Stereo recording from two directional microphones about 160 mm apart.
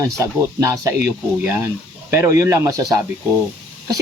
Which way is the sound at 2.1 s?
20° right (ahead or behind).